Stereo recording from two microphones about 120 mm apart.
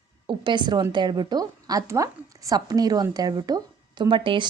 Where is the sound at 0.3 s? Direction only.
40° right (ahead or behind).